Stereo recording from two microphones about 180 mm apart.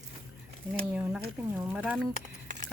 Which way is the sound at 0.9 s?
5° right (ahead or behind).